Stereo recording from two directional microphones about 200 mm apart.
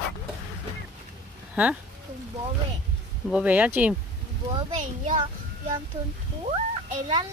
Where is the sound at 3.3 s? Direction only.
5° right (ahead or behind).